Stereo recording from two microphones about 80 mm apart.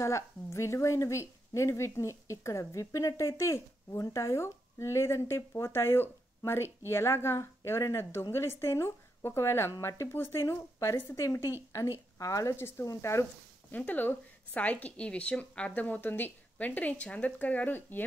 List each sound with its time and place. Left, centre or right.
0.0 s speech: left
12.2 s a woman's voice: left
13.7 s a woman's voice: left